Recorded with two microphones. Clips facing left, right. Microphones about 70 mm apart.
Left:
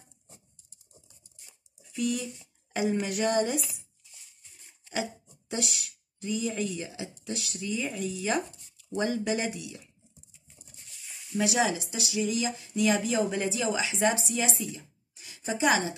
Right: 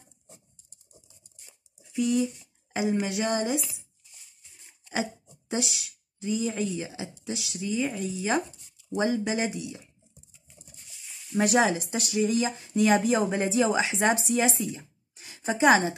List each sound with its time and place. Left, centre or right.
1.8 s speech: centre
5.5 s speech: right
10.7 s a sound: centre
11.3 s speech: right